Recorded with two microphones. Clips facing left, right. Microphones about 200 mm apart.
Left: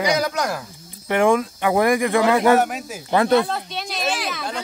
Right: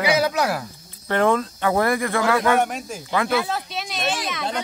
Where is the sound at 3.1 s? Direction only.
35° left (ahead or behind).